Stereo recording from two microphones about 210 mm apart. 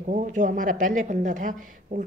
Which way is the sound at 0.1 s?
35° right (ahead or behind).